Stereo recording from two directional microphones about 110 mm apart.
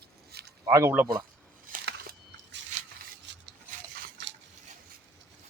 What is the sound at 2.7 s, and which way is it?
Rub, 90° right.